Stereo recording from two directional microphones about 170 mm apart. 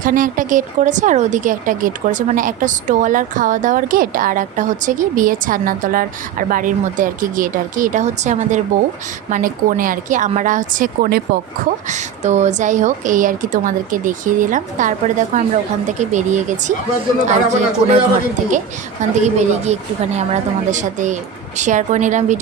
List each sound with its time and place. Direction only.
0.0 s speech: 50° right (ahead or behind)
11.9 s speech: 45° right (ahead or behind)
19.2 s speech: 40° right (ahead or behind)